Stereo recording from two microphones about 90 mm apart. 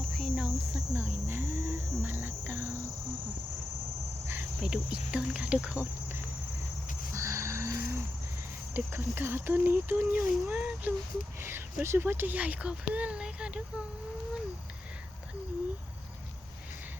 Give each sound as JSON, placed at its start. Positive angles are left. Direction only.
{"t": 0.1, "sound": "hum", "side_deg": 5}
{"t": 0.9, "sound": "speech", "side_deg": -20}
{"t": 4.6, "sound": "speech", "side_deg": -10}
{"t": 7.1, "sound": "a sound", "side_deg": -35}
{"t": 8.7, "sound": "speech", "side_deg": -25}